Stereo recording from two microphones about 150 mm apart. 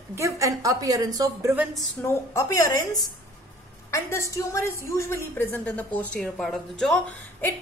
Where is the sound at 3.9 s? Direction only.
20° left (ahead or behind); by 7.1 s centre (ahead or behind).